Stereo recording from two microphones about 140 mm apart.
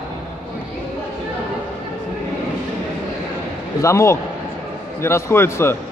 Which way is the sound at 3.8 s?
20° left (ahead or behind).